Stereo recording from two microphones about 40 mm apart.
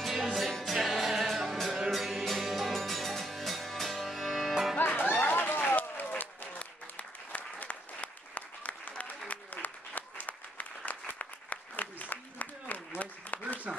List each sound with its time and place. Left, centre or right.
0.0 s music: centre
4.9 s run: left
5.8 s applause: left